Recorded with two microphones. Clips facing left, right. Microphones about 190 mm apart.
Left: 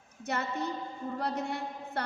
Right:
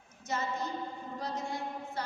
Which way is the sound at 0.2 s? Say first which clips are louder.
Left 2 dB; 65° left (ahead or behind).